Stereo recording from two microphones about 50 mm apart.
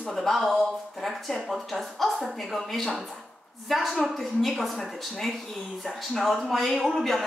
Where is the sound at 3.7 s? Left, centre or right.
Centre.